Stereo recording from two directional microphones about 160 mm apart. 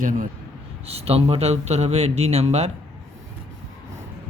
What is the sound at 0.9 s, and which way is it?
Speech, 40° right (ahead or behind).